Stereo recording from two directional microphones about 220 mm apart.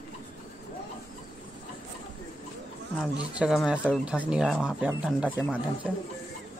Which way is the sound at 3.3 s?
5° right (ahead or behind).